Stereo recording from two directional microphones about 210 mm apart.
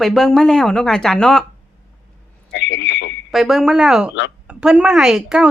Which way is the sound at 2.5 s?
60° left (ahead or behind).